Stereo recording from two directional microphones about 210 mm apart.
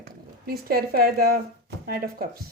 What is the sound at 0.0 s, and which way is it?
Speech, 45° right (ahead or behind).